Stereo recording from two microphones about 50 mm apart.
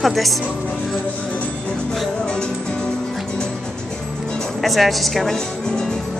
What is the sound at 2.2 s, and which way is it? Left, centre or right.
Music, centre.